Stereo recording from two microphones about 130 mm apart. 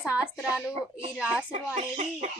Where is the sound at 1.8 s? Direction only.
60° right (ahead or behind).